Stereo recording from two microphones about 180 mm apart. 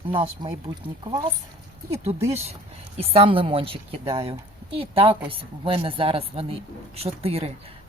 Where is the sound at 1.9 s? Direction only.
35° right (ahead or behind).